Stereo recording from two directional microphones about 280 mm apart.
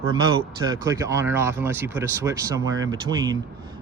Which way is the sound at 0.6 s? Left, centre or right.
Centre.